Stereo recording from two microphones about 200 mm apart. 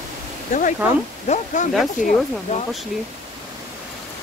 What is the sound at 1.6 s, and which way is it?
Speech, 40° left (ahead or behind).